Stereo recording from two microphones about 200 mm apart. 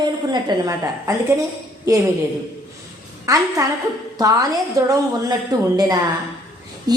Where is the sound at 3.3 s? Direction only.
15° right (ahead or behind).